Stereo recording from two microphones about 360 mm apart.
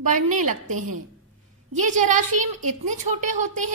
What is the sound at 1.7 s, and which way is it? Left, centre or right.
A woman's voice, right.